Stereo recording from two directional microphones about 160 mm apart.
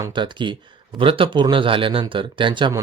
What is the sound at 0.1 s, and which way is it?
Speech, 30° right (ahead or behind).